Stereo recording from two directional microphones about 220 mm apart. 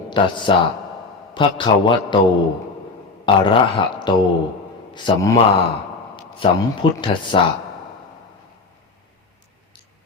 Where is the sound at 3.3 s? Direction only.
20° left (ahead or behind).